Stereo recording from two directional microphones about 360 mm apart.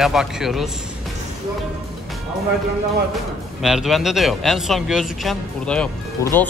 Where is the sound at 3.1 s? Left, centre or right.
Centre.